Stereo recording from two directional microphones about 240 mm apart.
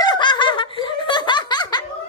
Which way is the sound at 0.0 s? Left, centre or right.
Centre.